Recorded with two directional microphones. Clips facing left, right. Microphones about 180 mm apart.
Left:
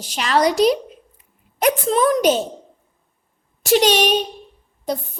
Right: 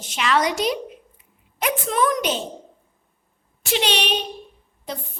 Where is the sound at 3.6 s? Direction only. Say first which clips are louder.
Left 8 dB; 45° left (ahead or behind).